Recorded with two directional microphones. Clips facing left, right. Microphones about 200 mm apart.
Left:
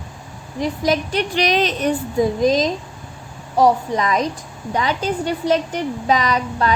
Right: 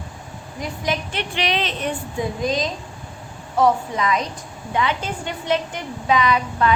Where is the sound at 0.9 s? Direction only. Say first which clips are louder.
Left 5 dB; 40° left (ahead or behind).